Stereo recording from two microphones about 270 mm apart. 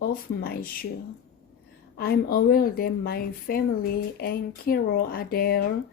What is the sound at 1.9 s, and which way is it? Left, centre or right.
Speech, left.